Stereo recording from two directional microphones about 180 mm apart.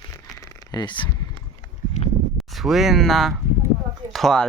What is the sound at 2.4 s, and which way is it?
Speech, centre (ahead or behind).